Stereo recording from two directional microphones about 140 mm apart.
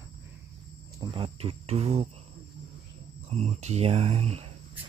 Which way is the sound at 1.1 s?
45° right (ahead or behind).